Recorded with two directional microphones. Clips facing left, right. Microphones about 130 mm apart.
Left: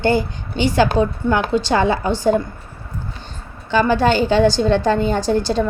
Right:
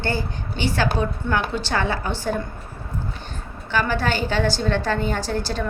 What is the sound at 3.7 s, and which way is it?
A woman's voice, 20° left (ahead or behind).